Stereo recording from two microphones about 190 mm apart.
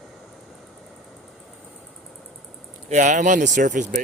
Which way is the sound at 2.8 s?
40° right (ahead or behind).